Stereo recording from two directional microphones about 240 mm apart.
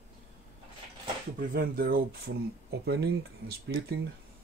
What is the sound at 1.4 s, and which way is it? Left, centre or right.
Speech, right.